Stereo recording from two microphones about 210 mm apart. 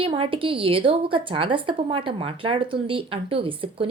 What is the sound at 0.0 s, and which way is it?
A woman's voice, 25° right (ahead or behind).